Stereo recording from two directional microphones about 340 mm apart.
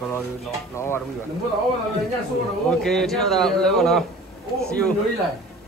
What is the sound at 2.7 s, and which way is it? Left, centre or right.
Speech, centre.